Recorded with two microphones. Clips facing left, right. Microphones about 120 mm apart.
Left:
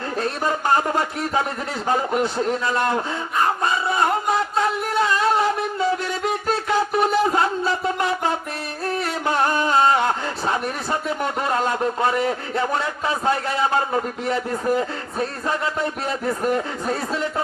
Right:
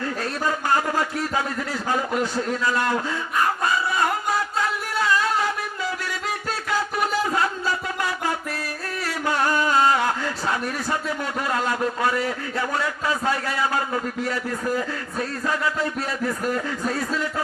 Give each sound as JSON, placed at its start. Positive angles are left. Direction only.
{"t": 0.2, "sound": "a man's voice", "side_deg": 25}
{"t": 3.6, "sound": "music", "side_deg": 25}
{"t": 6.2, "sound": "a sound", "side_deg": 25}
{"t": 8.9, "sound": "music", "side_deg": 25}
{"t": 11.2, "sound": "a man's voice", "side_deg": 25}